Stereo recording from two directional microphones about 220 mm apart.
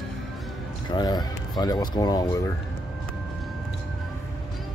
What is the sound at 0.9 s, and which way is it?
Speech, 20° left (ahead or behind).